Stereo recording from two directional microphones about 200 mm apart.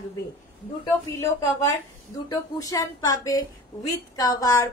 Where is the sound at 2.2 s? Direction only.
15° left (ahead or behind).